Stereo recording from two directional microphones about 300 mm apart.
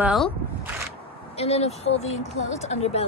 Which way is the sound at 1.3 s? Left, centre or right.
Left.